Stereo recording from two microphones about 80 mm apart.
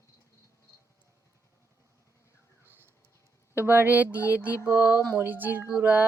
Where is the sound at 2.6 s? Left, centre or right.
Right.